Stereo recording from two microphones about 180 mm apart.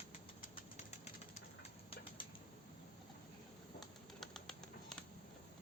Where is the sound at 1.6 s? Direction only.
30° left (ahead or behind).